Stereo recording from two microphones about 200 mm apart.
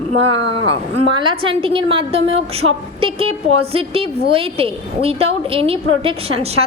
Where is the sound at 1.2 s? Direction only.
25° right (ahead or behind).